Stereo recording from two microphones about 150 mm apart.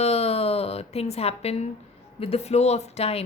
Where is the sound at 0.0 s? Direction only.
45° left (ahead or behind).